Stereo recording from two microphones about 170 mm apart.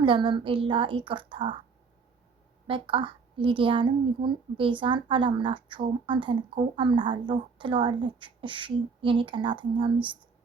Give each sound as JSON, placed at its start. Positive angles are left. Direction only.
{"t": 0.0, "sound": "a woman's voice", "side_deg": -30}
{"t": 2.6, "sound": "a woman's voice", "side_deg": -30}